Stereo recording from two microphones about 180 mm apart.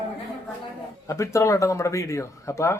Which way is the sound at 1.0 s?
15° left (ahead or behind).